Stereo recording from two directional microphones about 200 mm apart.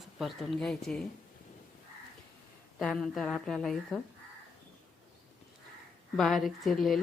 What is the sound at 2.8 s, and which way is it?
A woman's voice, centre (ahead or behind).